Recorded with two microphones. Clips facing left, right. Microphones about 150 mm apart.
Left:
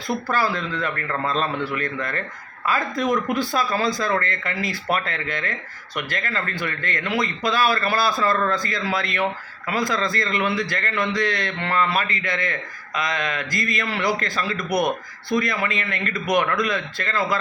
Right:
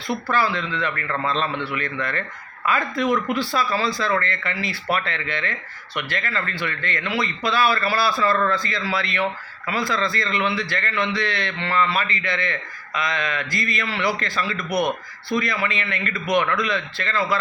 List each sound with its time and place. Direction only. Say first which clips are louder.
0.1 s a man's voice: even; 40° left (ahead or behind)